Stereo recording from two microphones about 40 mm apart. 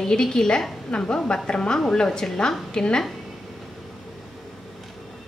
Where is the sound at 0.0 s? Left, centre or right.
Centre.